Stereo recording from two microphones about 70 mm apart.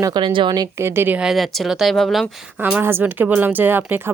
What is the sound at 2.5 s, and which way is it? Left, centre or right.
Speech, right.